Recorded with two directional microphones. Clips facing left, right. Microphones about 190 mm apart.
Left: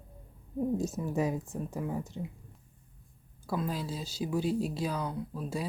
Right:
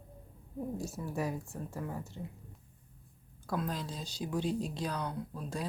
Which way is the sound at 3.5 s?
5° left (ahead or behind).